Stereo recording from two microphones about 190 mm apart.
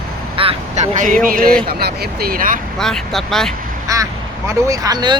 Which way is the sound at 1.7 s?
55° right (ahead or behind).